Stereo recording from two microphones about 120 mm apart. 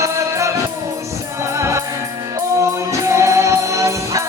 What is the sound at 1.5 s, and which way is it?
Music, 25° right (ahead or behind).